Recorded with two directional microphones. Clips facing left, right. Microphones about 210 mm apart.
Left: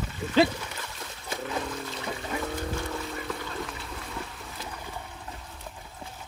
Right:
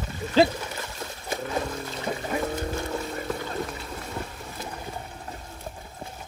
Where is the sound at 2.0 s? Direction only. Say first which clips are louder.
Right 6 dB; 40° right (ahead or behind).